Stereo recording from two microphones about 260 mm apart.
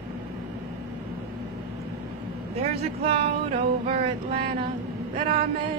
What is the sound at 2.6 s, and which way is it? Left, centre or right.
Speech, right.